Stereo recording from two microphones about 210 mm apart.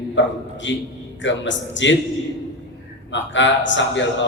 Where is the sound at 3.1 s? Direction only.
60° left (ahead or behind).